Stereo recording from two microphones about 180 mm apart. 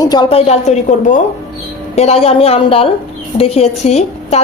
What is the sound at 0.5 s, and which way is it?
A woman's voice, 40° left (ahead or behind).